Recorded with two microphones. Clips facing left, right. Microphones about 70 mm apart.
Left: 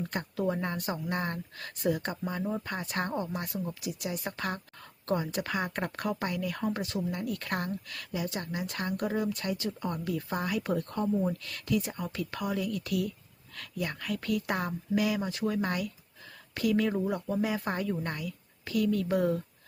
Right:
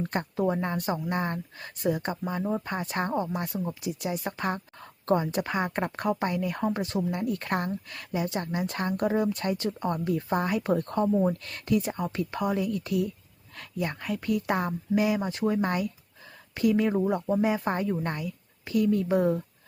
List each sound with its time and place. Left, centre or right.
0.0 s speech: right
0.4 s speech: right